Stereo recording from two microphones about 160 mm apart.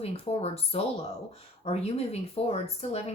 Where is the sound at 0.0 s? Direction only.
40° left (ahead or behind).